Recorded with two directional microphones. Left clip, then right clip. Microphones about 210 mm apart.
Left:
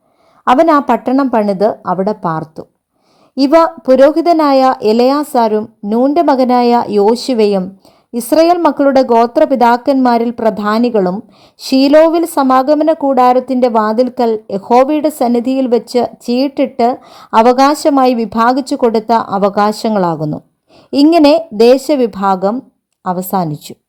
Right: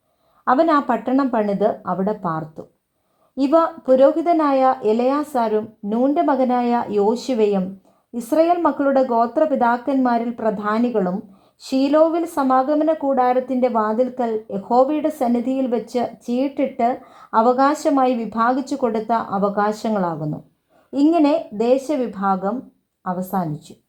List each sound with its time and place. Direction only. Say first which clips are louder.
0.4 s a woman's voice: left 8 dB; 30° left (ahead or behind)